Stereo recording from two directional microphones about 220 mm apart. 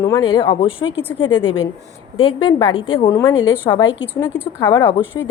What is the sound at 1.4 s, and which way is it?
Speech, 60° left (ahead or behind).